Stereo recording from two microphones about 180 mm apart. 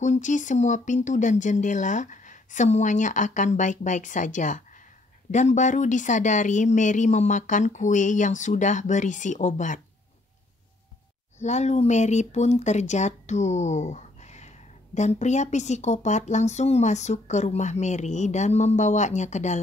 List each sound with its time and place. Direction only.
0.0 s speech: 40° left (ahead or behind)
11.3 s speech: 40° left (ahead or behind)